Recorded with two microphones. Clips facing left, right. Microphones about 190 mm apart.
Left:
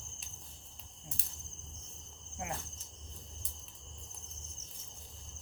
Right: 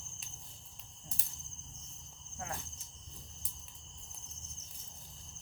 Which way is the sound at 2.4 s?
20° left (ahead or behind).